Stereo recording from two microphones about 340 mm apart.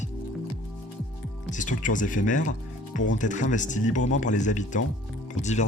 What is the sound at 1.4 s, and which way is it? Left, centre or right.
Speech, left.